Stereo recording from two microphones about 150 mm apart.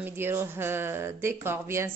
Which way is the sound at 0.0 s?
15° right (ahead or behind).